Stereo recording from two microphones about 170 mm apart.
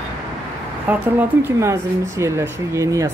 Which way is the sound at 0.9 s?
10° right (ahead or behind).